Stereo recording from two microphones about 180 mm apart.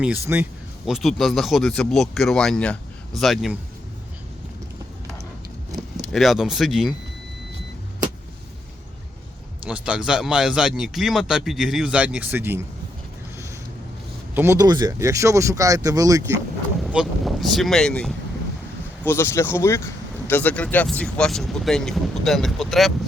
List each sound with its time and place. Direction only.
0.3 s speech: 10° right (ahead or behind)
6.0 s speech: centre (ahead or behind)
9.6 s speech: 5° right (ahead or behind)
14.3 s speech: 15° right (ahead or behind)
16.8 s speech: centre (ahead or behind)